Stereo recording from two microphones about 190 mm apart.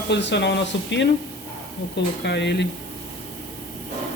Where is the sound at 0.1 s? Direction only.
65° left (ahead or behind).